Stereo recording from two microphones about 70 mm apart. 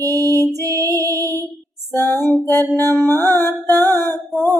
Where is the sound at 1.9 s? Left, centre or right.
Left.